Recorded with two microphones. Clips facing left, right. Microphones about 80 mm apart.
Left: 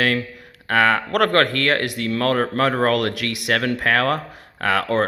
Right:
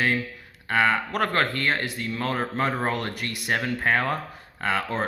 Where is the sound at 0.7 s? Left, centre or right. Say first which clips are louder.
Left 5 dB; left.